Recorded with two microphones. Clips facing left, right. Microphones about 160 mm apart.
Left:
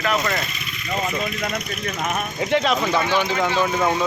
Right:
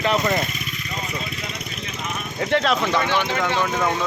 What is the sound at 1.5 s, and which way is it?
Speech, 60° left (ahead or behind).